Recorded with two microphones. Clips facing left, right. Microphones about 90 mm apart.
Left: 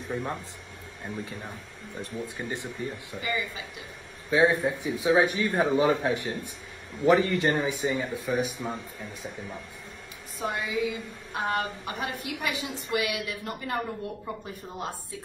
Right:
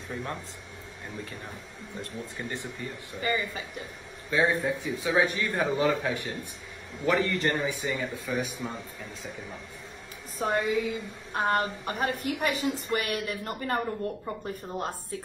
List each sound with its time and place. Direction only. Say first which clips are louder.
0.1 s a man's voice: left 3 dB; 15° left (ahead or behind)
2.2 s a man's voice: left 2 dB; 15° left (ahead or behind)
3.2 s a woman's voice: right 3 dB; 45° right (ahead or behind)
4.3 s a man's voice: left 3 dB; 15° left (ahead or behind)
10.4 s a woman's voice: right 2 dB; 50° right (ahead or behind)